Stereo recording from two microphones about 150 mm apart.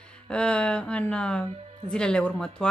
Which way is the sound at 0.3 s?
5° left (ahead or behind).